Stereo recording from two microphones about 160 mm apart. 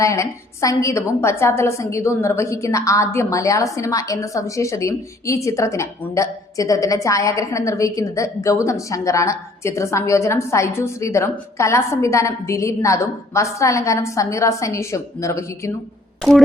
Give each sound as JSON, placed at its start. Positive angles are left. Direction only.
{"t": 0.0, "sound": "a woman's voice", "side_deg": 20}